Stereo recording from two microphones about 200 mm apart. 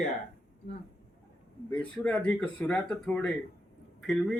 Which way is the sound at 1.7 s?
5° left (ahead or behind).